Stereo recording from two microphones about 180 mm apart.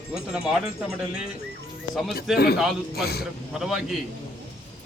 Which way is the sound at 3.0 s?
60° left (ahead or behind).